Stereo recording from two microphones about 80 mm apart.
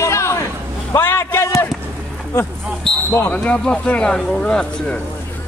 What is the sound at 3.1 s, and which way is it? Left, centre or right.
Speech, left.